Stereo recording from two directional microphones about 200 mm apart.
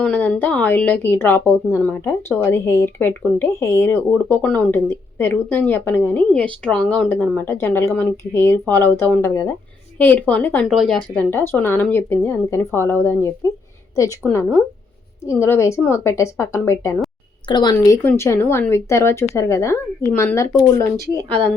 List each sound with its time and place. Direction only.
0.0 s a woman's voice: 5° left (ahead or behind)
21.2 s speech: 25° right (ahead or behind)